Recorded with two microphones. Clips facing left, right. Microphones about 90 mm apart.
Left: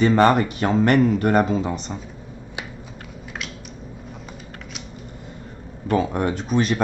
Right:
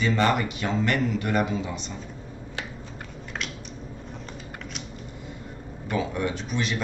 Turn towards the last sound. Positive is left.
turn(degrees=45)  # may be behind; listen again after turning